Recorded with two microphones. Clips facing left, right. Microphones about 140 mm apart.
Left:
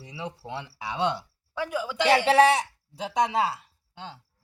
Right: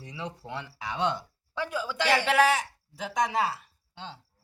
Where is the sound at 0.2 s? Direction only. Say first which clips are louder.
Left 2 dB; 15° left (ahead or behind).